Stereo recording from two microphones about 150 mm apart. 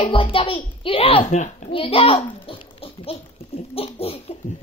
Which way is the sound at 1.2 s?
55° left (ahead or behind).